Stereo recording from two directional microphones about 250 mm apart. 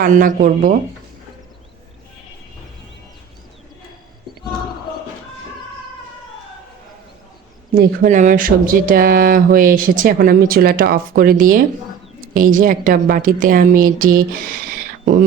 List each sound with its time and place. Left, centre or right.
0.0 s speech: right
7.7 s speech: right